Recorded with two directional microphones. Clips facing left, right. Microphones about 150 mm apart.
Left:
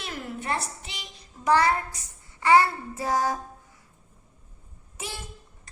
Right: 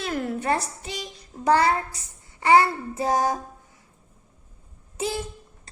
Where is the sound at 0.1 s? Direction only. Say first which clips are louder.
Right 6 dB; 50° right (ahead or behind).